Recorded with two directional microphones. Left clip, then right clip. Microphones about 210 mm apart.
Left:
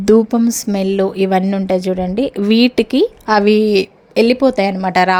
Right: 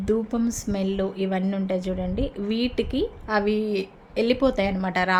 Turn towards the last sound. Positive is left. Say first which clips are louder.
# left 10 dB
turn(degrees=40)  # may be behind; listen again after turning